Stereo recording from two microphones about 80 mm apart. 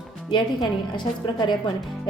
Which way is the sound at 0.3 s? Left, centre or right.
Left.